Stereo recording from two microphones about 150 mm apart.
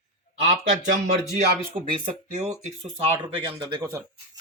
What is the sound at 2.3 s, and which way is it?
Speech, 50° right (ahead or behind).